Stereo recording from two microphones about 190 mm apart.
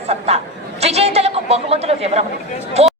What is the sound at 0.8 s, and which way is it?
Chatter, 35° right (ahead or behind).